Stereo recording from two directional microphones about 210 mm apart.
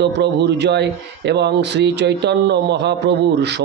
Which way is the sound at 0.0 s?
55° right (ahead or behind).